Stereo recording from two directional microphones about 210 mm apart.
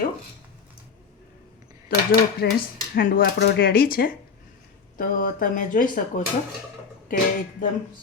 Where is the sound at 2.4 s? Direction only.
50° left (ahead or behind).